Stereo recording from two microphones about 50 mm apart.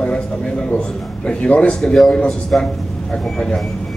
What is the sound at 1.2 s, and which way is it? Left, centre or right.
A man's voice, left.